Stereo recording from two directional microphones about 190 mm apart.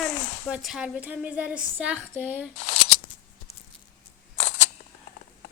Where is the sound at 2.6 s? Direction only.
30° left (ahead or behind).